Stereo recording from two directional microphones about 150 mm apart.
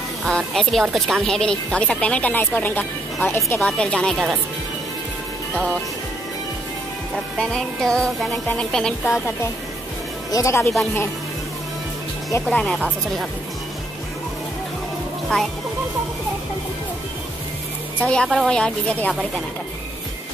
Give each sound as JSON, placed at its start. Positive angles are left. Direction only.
{"t": 0.2, "sound": "speech", "side_deg": 0}
{"t": 7.3, "sound": "speech", "side_deg": 5}
{"t": 10.3, "sound": "speech", "side_deg": 20}
{"t": 12.4, "sound": "speech", "side_deg": 5}
{"t": 18.0, "sound": "speech", "side_deg": 5}